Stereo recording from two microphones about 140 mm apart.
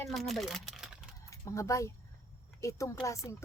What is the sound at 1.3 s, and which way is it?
Speech, 20° left (ahead or behind).